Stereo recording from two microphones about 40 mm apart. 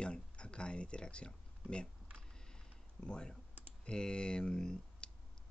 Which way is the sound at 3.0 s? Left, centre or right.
Left.